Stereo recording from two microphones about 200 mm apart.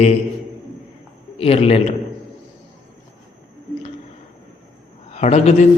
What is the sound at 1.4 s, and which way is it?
Speech, 30° left (ahead or behind).